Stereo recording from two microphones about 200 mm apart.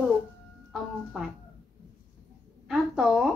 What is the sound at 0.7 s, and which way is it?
Speech, centre (ahead or behind).